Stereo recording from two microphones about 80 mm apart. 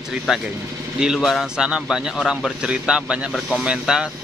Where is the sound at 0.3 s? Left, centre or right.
Centre.